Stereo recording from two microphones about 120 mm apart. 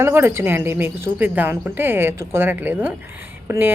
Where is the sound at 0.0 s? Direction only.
20° right (ahead or behind).